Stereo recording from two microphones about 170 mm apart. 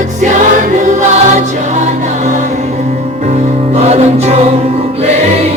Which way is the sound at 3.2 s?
40° right (ahead or behind).